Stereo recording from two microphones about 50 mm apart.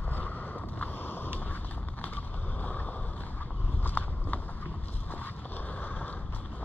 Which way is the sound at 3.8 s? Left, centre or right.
Left.